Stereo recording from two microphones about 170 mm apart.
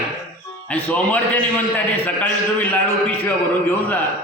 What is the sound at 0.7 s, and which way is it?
A man's voice, 10° left (ahead or behind).